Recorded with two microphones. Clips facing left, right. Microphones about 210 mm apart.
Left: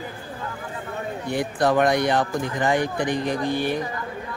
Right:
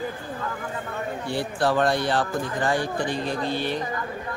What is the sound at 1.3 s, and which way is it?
Speech, 15° left (ahead or behind).